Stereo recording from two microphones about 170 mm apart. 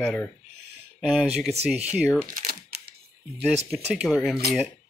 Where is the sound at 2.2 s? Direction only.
50° right (ahead or behind).